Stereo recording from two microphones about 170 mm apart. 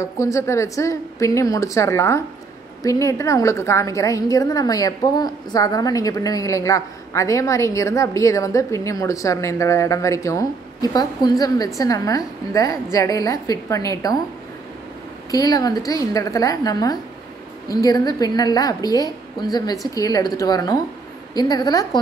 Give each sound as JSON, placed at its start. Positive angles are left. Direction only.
{"t": 0.0, "sound": "a woman's voice", "side_deg": 15}
{"t": 15.3, "sound": "a woman's voice", "side_deg": 20}